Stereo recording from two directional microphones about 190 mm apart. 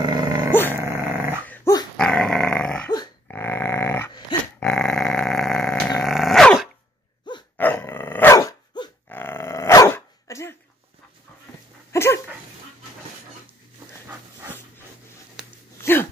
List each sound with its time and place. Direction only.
0.0 s dog: 20° right (ahead or behind)
0.5 s dog: 10° left (ahead or behind)
0.7 s dog: 15° right (ahead or behind)
1.5 s dog: 15° left (ahead or behind)
2.0 s dog: 5° left (ahead or behind)
11.9 s dog: 15° left (ahead or behind)
15.8 s dog: 10° left (ahead or behind)